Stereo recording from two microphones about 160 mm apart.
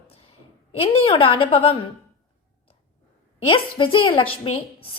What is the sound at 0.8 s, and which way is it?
Speech, 35° left (ahead or behind).